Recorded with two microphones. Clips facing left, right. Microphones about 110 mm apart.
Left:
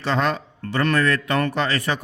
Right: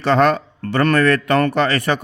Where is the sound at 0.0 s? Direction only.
60° right (ahead or behind).